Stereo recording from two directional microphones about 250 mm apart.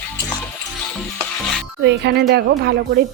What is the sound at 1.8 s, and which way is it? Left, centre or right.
Speech, right.